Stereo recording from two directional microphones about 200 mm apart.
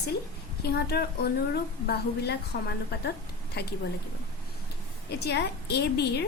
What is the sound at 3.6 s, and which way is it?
Speech, 55° left (ahead or behind).